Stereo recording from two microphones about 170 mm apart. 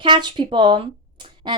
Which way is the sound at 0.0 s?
25° right (ahead or behind).